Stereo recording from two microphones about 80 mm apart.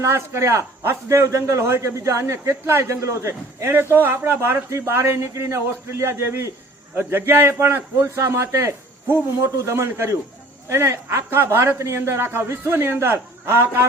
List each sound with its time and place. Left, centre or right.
0.0 s a man's voice: right